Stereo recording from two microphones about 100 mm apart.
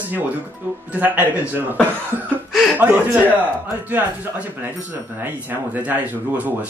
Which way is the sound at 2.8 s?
15° right (ahead or behind).